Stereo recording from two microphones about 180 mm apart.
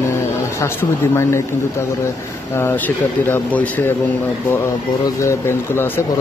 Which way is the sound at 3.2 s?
10° left (ahead or behind).